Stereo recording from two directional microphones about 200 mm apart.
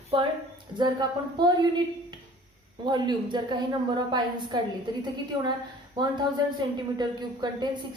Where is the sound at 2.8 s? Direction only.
20° right (ahead or behind).